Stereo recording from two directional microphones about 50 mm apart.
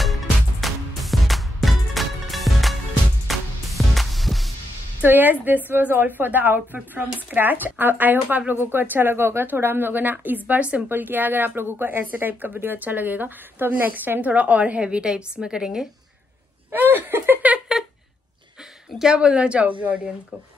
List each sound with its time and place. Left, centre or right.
0.0 s music: centre
5.0 s speech: right; by 15.9 s centre
16.7 s speech: right
18.9 s speech: centre